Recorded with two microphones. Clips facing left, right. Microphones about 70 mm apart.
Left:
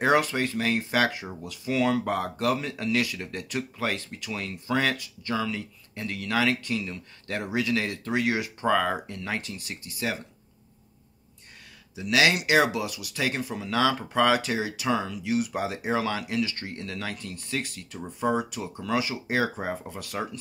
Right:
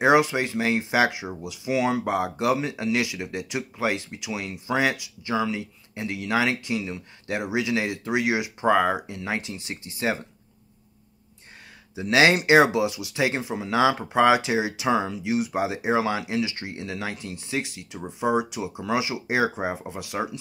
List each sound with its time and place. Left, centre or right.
0.0 s speech: centre
11.9 s speech: right